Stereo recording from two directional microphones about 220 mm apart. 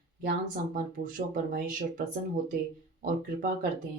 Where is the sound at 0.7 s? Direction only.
40° right (ahead or behind).